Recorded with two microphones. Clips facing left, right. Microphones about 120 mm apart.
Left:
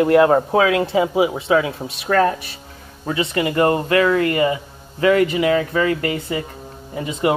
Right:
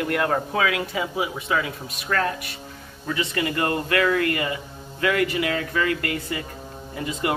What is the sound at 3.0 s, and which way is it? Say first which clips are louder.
Speech: left 5 dB; 25° left (ahead or behind).